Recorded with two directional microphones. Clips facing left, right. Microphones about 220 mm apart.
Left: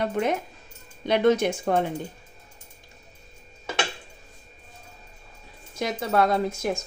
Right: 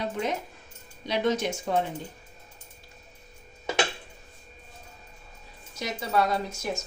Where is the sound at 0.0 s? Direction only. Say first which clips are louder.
Left 5 dB; 55° left (ahead or behind).